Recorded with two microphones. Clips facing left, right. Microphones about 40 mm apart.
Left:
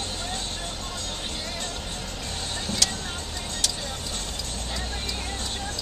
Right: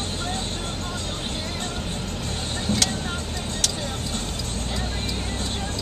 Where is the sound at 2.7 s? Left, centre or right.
Right.